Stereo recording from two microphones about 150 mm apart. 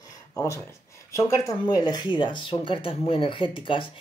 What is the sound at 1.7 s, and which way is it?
Speech, 25° left (ahead or behind).